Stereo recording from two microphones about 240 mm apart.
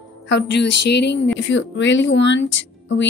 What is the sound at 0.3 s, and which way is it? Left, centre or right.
Speech, left.